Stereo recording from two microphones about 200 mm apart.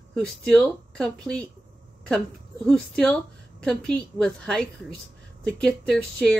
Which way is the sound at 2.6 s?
5° left (ahead or behind).